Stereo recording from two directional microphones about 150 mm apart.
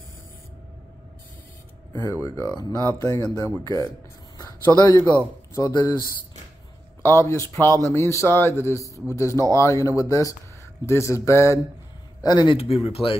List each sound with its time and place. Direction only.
2.2 s speech: 20° left (ahead or behind)
7.0 s a man's voice: 20° left (ahead or behind); by 13.2 s 35° left (ahead or behind)